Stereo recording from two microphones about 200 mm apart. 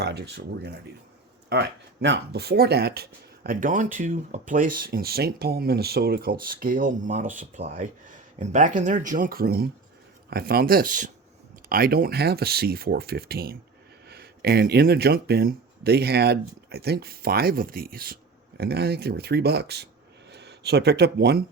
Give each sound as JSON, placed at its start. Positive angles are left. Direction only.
{"t": 0.0, "sound": "speech", "side_deg": -55}